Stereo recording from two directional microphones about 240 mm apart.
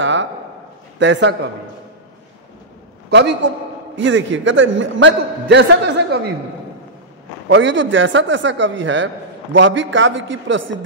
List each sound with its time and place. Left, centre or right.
0.0 s a sound: right
0.9 s a man's voice: right
3.1 s a man's voice: right
7.4 s a man's voice: right